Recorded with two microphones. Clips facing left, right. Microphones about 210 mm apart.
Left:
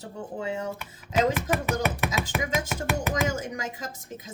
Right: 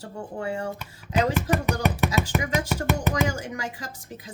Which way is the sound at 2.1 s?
20° left (ahead or behind).